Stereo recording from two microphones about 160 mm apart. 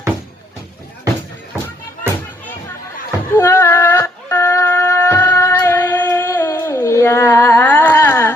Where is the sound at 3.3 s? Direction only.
15° left (ahead or behind).